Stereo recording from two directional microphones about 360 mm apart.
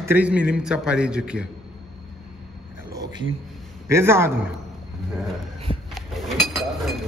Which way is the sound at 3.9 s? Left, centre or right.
Centre.